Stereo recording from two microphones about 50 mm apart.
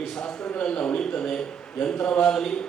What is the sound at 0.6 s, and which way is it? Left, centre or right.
Speech, centre.